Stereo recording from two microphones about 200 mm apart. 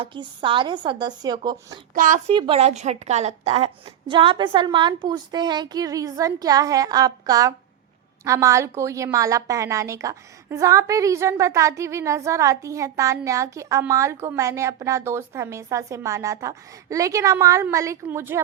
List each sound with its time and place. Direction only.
0.0 s a woman's voice: 25° right (ahead or behind)
2.0 s a woman's voice: 40° right (ahead or behind); by 18.3 s 10° right (ahead or behind)